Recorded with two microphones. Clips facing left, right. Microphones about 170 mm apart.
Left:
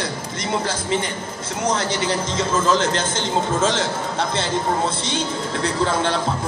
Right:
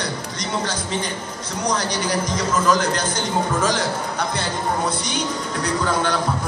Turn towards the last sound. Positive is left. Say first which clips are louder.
# left 1 dB
turn(degrees=25)  # may be behind; listen again after turning